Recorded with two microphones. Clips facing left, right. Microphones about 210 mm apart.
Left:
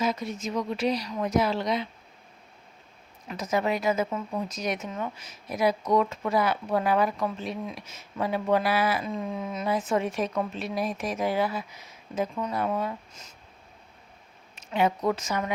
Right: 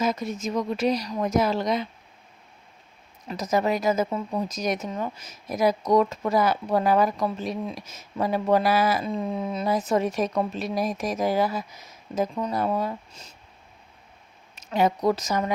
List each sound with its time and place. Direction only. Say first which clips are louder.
0.0 s speech: right 2 dB; 45° right (ahead or behind)
3.2 s speech: right 3 dB; 40° right (ahead or behind)
14.5 s speech: right 2 dB; 40° right (ahead or behind)